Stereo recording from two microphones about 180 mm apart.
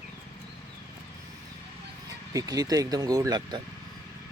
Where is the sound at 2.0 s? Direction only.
20° right (ahead or behind).